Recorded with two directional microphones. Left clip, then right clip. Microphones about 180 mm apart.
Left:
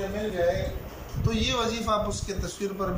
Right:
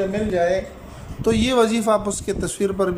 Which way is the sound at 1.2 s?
50° right (ahead or behind).